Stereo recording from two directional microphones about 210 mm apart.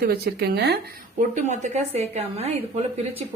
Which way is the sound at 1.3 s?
35° right (ahead or behind).